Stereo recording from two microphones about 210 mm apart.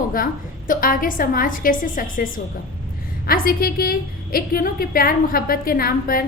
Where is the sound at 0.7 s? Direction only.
40° left (ahead or behind).